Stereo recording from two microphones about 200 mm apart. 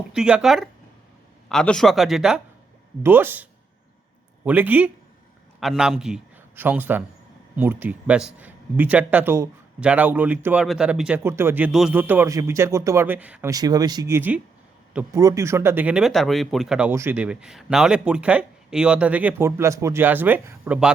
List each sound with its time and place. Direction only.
0.1 s speech: 5° right (ahead or behind)
4.4 s a man's voice: 10° right (ahead or behind)
13.5 s speech: 20° right (ahead or behind)